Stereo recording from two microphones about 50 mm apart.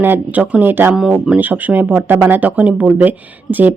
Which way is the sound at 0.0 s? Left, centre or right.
Right.